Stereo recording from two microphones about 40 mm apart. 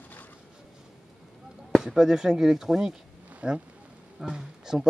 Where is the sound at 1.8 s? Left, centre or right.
Centre.